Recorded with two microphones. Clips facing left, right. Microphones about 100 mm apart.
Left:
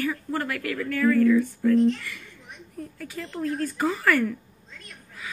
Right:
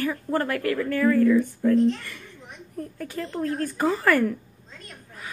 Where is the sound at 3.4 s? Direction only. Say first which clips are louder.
Left 1 dB; 40° right (ahead or behind).